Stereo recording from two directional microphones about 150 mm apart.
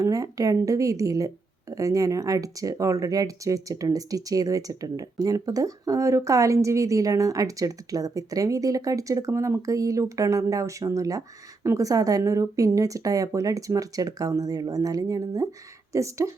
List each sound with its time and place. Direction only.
0.0 s speech: 25° right (ahead or behind)